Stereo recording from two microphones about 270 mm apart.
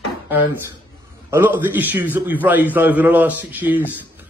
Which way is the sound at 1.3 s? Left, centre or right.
Centre.